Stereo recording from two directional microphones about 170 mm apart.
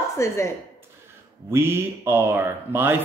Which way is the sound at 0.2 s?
15° left (ahead or behind).